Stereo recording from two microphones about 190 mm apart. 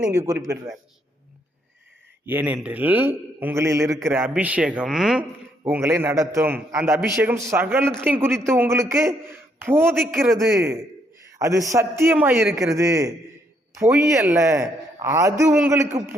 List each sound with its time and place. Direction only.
0.1 s a man's voice: 15° right (ahead or behind)
2.2 s a man's voice: 10° right (ahead or behind)
5.6 s a man's voice: 15° right (ahead or behind)
10.1 s speech: centre (ahead or behind)
10.3 s a man's voice: 15° right (ahead or behind)
11.3 s a sound: 15° right (ahead or behind)
11.7 s a man's voice: 15° right (ahead or behind)
13.9 s speech: 5° right (ahead or behind)
14.3 s a man's voice: 15° right (ahead or behind)